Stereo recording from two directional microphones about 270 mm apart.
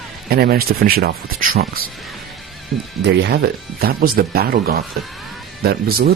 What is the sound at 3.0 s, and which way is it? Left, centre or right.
Speech, right.